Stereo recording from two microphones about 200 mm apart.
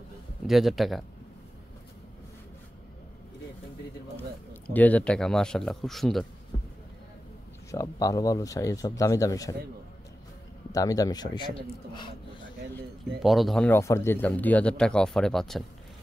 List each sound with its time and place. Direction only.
0.5 s speech: centre (ahead or behind)
4.6 s speech: 5° left (ahead or behind)
7.7 s speech: 15° left (ahead or behind)
10.7 s a man's voice: 15° left (ahead or behind)
13.2 s speech: centre (ahead or behind)